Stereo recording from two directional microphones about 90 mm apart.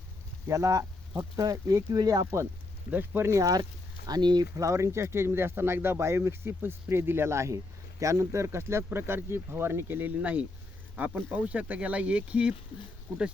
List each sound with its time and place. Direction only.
0.4 s speech: 35° right (ahead or behind)
2.9 s speech: 20° right (ahead or behind)
3.5 s speech: 45° right (ahead or behind)
4.5 s speech: 35° right (ahead or behind); by 12.5 s 10° right (ahead or behind)